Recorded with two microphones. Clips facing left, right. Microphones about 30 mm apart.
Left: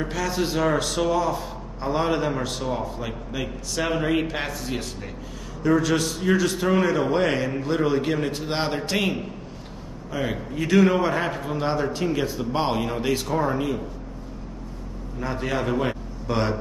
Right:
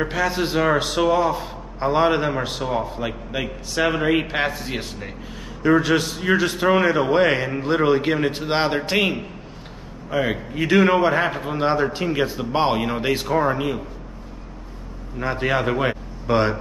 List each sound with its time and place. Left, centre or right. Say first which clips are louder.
0.0 s a man's voice: right 4 dB; right
4.5 s a man's voice: right 2 dB; right
15.1 s a man's voice: right 5 dB; right